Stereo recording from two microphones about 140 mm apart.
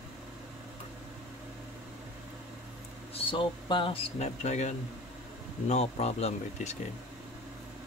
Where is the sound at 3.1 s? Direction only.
40° left (ahead or behind).